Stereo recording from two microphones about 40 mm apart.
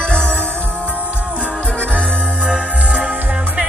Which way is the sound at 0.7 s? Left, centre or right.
Right.